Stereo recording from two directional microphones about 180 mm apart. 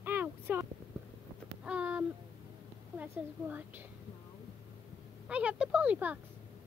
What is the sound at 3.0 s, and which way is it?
Speech, 10° right (ahead or behind).